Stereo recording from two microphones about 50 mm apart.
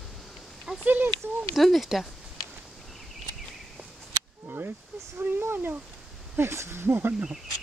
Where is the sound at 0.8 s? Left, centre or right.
Right.